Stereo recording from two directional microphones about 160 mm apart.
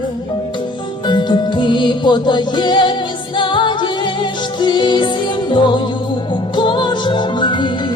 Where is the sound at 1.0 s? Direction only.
30° left (ahead or behind).